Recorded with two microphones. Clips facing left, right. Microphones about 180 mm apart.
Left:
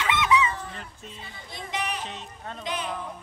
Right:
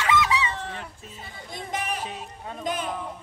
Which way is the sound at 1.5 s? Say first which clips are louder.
Right 1 dB; 50° right (ahead or behind).